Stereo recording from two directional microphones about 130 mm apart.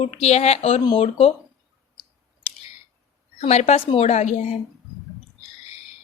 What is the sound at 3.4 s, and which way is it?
Speech, 60° left (ahead or behind).